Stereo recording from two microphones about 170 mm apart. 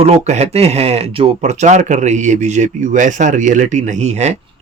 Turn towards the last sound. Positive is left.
turn(degrees=-40)  # may be behind; listen again after turning